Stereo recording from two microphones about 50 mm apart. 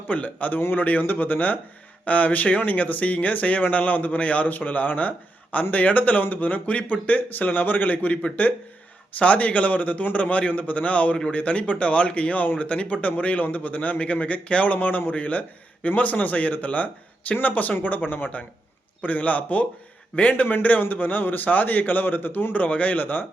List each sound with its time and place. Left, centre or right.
0.1 s a man's voice: left